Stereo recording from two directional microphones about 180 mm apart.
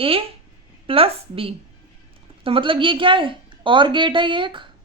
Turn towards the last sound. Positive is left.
turn(degrees=-25)  # may be behind; listen again after turning